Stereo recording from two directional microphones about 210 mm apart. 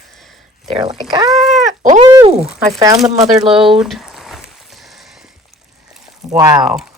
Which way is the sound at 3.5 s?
25° right (ahead or behind).